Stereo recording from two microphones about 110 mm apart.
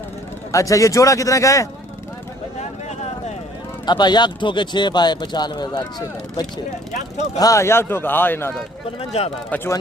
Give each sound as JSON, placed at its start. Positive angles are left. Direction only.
{"t": 0.5, "sound": "speech", "side_deg": 30}
{"t": 2.6, "sound": "a sound", "side_deg": 90}
{"t": 3.8, "sound": "speech", "side_deg": 40}
{"t": 9.0, "sound": "speech", "side_deg": 65}